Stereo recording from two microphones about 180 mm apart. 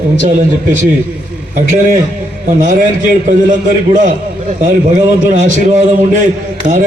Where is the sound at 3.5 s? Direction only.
45° right (ahead or behind).